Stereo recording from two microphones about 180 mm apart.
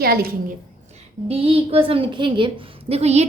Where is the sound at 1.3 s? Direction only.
30° right (ahead or behind).